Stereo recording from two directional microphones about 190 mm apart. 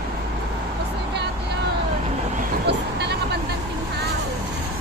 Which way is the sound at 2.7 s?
60° right (ahead or behind).